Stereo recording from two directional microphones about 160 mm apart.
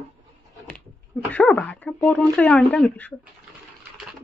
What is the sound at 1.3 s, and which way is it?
Speech, 5° left (ahead or behind).